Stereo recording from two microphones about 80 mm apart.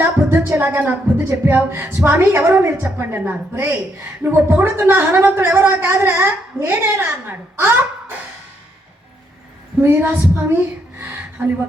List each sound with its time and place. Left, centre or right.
0.0 s music: right
1.5 s a woman's voice: right
9.8 s a woman's voice: right